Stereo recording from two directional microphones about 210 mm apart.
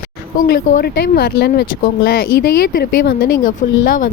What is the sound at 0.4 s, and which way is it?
Speech, 45° left (ahead or behind).